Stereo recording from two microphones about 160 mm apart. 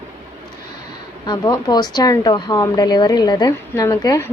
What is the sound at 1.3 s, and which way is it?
Speech, 25° left (ahead or behind).